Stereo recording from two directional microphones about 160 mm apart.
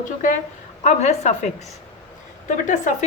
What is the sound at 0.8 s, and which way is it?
Speech, 45° left (ahead or behind).